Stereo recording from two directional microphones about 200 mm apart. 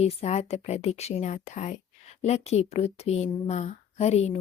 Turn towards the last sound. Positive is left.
turn(degrees=30)  # may be behind; listen again after turning